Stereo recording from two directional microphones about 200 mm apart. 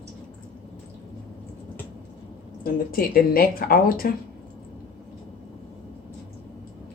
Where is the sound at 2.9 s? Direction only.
45° left (ahead or behind).